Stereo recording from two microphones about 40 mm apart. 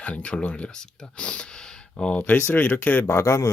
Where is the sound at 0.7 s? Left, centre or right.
Left.